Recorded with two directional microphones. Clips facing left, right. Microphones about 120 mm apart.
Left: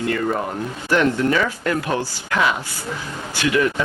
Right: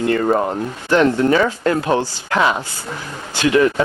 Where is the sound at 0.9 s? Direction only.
35° right (ahead or behind).